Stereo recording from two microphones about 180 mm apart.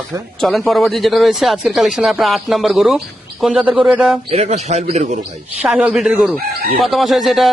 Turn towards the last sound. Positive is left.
turn(degrees=0)  # may be behind; listen again after turning